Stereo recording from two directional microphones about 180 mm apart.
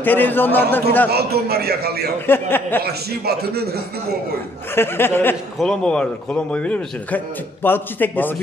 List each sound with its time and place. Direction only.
0.0 s a man's voice: 10° left (ahead or behind)
1.1 s a man's voice: 60° right (ahead or behind)
2.2 s a man's voice: 10° left (ahead or behind)
2.8 s a man's voice: 60° right (ahead or behind)
4.7 s a man's voice: 10° left (ahead or behind)